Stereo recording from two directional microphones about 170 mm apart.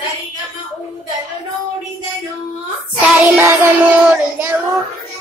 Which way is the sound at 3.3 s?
15° right (ahead or behind).